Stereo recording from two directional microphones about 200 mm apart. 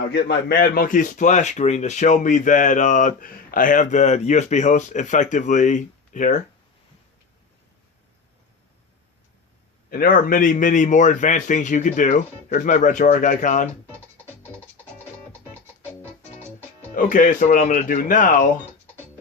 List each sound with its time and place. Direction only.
0.1 s a man's voice: 55° left (ahead or behind)
9.9 s a man's voice: 45° left (ahead or behind)
16.9 s a man's voice: 40° left (ahead or behind)